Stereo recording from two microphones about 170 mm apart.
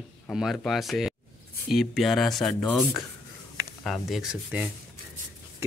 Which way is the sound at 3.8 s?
Centre (ahead or behind).